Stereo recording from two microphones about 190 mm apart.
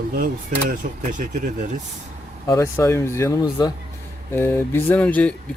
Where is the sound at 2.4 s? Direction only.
15° left (ahead or behind).